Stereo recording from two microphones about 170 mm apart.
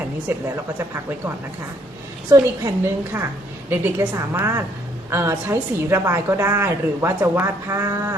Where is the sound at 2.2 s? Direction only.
15° right (ahead or behind).